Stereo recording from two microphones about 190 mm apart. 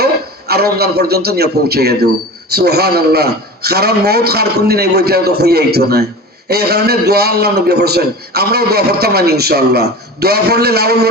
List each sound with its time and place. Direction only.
0.0 s a man's voice: 55° right (ahead or behind)